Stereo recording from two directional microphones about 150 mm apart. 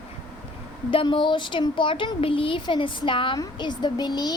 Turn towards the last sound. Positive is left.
turn(degrees=30)  # may be behind; listen again after turning